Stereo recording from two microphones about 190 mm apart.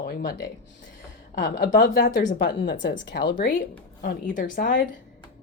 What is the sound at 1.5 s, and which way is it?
Speech, 45° left (ahead or behind).